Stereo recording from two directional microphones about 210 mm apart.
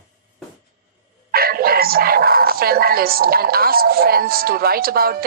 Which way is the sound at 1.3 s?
45° right (ahead or behind).